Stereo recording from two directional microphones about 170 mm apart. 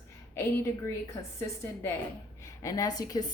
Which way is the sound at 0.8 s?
15° left (ahead or behind).